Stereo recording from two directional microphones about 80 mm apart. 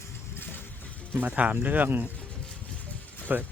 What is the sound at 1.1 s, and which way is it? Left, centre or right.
Speech, right.